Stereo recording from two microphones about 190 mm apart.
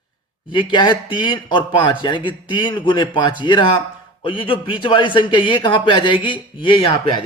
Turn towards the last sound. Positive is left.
turn(degrees=25)  # may be behind; listen again after turning